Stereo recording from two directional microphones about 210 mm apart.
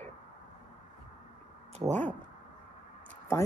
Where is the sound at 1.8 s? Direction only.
15° right (ahead or behind).